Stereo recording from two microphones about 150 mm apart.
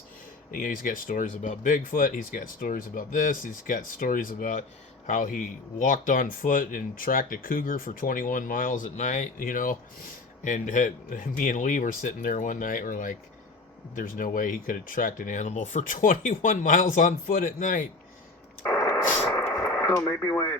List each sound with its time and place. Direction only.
0.5 s speech: 65° left (ahead or behind)
18.7 s radio: 20° left (ahead or behind)
19.2 s a sound: 15° left (ahead or behind)
20.0 s speech: 15° left (ahead or behind)